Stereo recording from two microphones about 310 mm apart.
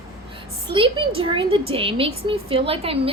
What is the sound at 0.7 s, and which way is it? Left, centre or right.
A woman's voice, centre.